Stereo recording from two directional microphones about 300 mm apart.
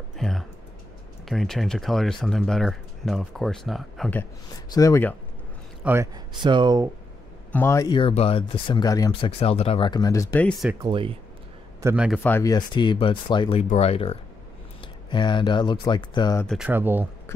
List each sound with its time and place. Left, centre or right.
0.2 s a sound: centre
1.2 s speech: centre
5.9 s speech: centre
7.5 s speech: centre
10.8 s speech: centre
11.8 s speech: centre
12.2 s speech: centre
16.4 s speech: centre